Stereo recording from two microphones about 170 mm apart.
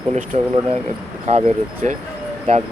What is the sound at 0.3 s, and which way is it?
Speech, 35° right (ahead or behind).